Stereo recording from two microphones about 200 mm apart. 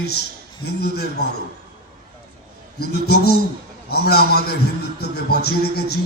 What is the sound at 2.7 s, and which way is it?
A man's voice, 55° left (ahead or behind).